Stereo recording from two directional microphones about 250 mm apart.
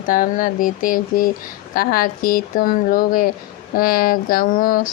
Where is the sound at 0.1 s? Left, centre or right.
Left.